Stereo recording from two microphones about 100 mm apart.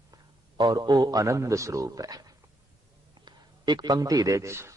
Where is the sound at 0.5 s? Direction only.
45° right (ahead or behind).